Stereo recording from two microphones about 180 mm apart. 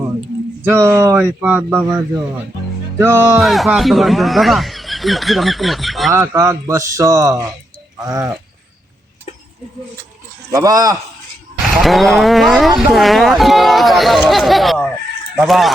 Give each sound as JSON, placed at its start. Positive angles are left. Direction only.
{"t": 0.6, "sound": "speech", "side_deg": -15}
{"t": 3.4, "sound": "speech", "side_deg": 0}
{"t": 6.1, "sound": "speech", "side_deg": -15}
{"t": 10.5, "sound": "speech", "side_deg": -20}
{"t": 11.8, "sound": "speech", "side_deg": 0}